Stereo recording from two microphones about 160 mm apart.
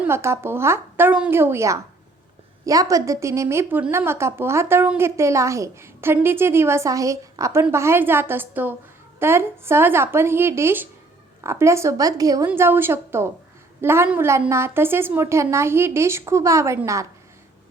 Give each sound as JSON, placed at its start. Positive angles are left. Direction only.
{"t": 0.0, "sound": "a woman's voice", "side_deg": -15}